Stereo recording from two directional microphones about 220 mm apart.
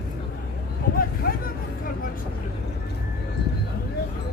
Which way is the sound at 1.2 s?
40° left (ahead or behind).